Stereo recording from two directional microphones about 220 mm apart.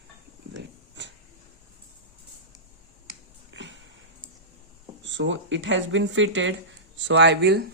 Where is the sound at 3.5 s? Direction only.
55° right (ahead or behind).